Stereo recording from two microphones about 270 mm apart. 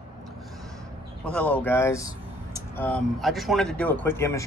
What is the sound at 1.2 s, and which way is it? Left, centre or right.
Speech, centre.